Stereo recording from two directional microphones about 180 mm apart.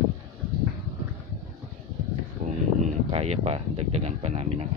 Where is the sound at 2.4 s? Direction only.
45° right (ahead or behind).